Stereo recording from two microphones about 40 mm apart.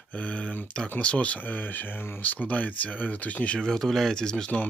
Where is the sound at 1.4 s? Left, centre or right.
Left.